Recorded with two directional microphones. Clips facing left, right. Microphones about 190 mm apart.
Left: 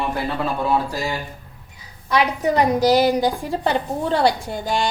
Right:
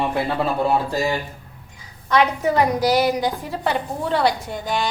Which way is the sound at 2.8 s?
25° left (ahead or behind).